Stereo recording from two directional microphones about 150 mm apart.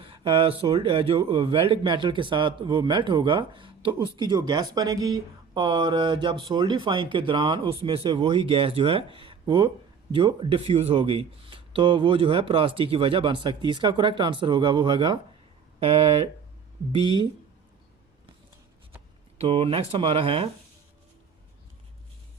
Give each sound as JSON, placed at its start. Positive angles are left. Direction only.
{"t": 0.0, "sound": "speech", "side_deg": -35}
{"t": 19.4, "sound": "speech", "side_deg": -40}